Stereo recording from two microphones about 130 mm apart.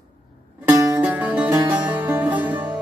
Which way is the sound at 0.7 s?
25° right (ahead or behind).